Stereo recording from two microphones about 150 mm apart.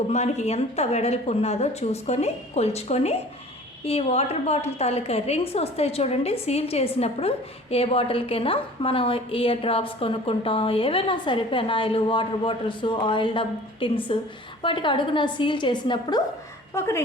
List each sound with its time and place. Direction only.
0.1 s a woman's voice: 45° left (ahead or behind); by 16.2 s 30° left (ahead or behind)
16.7 s speech: 15° left (ahead or behind)